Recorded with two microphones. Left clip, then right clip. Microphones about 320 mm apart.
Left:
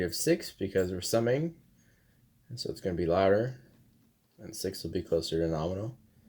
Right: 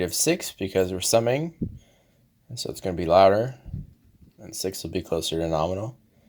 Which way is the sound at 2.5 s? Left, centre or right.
Centre.